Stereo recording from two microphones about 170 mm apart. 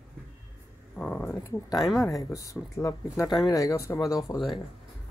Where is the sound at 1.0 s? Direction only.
5° left (ahead or behind).